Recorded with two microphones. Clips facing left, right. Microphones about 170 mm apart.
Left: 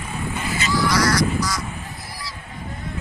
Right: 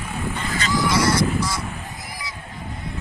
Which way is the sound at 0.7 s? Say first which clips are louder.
Even; 20° right (ahead or behind).